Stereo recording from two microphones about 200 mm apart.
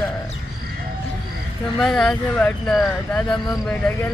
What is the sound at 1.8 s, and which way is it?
Speech, centre (ahead or behind).